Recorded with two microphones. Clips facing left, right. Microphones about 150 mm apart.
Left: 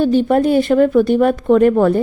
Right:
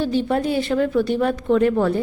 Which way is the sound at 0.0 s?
50° left (ahead or behind).